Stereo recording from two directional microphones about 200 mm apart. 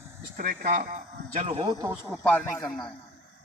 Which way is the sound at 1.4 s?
25° right (ahead or behind).